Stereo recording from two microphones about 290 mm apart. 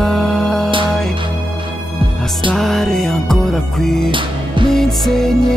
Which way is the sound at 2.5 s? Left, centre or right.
Centre.